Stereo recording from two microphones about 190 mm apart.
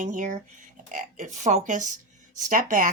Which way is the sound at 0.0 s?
45° right (ahead or behind).